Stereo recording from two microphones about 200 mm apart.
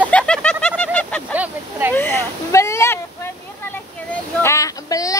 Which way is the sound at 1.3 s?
5° right (ahead or behind).